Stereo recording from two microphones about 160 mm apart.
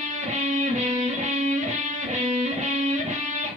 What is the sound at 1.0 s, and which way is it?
Music, 50° right (ahead or behind).